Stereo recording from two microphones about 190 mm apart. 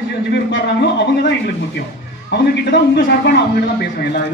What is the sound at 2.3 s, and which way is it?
A woman's voice, 65° left (ahead or behind).